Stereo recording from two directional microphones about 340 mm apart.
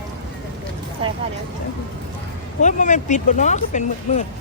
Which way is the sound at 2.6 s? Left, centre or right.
Left.